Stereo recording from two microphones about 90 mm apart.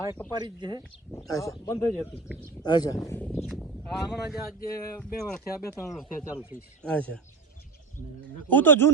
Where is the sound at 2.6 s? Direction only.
50° left (ahead or behind).